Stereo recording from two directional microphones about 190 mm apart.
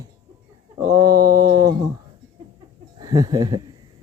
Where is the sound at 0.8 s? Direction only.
20° right (ahead or behind).